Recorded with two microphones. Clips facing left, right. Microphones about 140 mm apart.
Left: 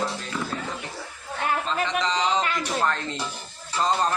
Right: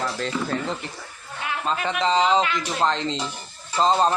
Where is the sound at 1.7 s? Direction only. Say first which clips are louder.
Right 2 dB; 45° right (ahead or behind).